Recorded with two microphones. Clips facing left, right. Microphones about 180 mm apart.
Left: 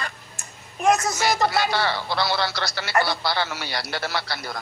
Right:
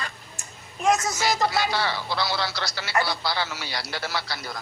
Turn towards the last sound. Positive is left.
turn(degrees=60)  # may be behind; listen again after turning